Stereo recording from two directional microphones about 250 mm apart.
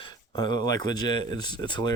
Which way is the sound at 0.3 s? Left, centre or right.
Centre.